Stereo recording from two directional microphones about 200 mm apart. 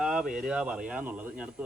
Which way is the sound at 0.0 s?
5° right (ahead or behind).